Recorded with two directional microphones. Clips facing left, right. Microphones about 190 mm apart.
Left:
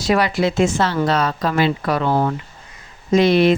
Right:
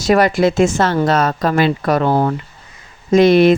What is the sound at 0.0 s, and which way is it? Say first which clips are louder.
Speech: right 5 dB; 45° right (ahead or behind).